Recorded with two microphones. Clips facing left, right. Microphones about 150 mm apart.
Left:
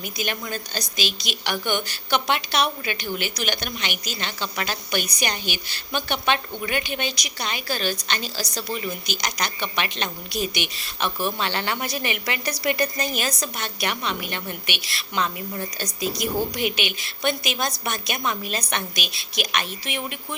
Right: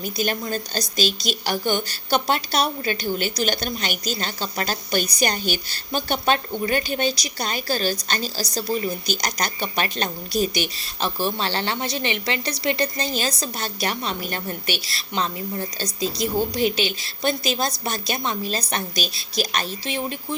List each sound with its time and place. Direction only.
0.0 s a woman's voice: 35° right (ahead or behind)